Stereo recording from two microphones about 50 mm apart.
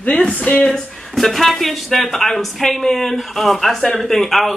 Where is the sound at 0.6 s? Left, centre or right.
Centre.